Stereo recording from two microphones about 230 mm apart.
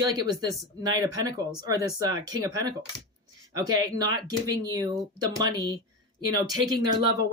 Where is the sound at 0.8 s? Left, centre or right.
Centre.